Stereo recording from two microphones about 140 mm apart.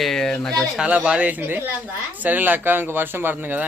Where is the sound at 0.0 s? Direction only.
Centre (ahead or behind).